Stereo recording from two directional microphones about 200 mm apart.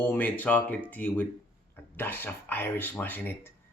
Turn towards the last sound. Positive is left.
turn(degrees=10)  # may be behind; listen again after turning